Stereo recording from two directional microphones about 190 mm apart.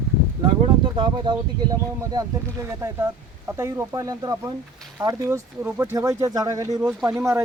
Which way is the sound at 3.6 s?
15° right (ahead or behind).